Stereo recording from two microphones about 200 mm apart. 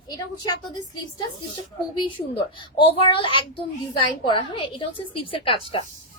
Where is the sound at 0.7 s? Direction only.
20° left (ahead or behind).